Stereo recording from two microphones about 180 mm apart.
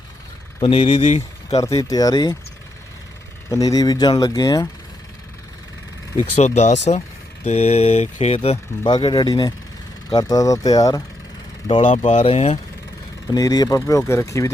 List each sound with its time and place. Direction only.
0.6 s speech: 30° left (ahead or behind)
1.8 s speech: 20° left (ahead or behind)
3.5 s speech: 20° left (ahead or behind)
6.3 s speech: 35° left (ahead or behind); by 11.0 s 20° left (ahead or behind)
11.8 s speech: 40° left (ahead or behind)
13.3 s speech: 20° left (ahead or behind)